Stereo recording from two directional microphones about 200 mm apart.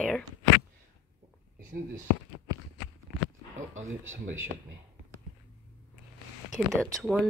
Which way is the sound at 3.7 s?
80° right.